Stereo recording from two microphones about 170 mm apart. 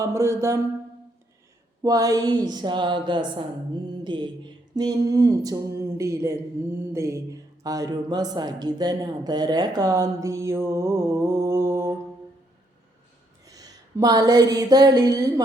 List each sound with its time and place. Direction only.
0.0 s speech: 20° right (ahead or behind)
1.8 s speech: 20° right (ahead or behind)
13.4 s a sound: 20° right (ahead or behind)